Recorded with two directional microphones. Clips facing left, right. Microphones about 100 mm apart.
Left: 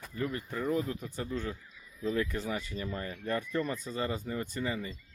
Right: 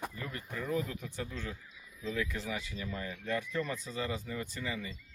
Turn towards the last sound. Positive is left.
turn(degrees=35)  # may be behind; listen again after turning